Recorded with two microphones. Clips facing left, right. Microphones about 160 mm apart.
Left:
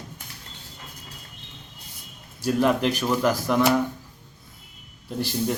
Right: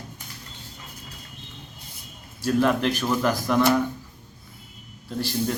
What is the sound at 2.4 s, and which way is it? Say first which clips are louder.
Speech: even; 10° left (ahead or behind).